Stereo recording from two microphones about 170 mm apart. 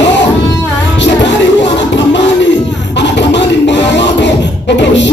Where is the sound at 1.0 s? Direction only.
90° left.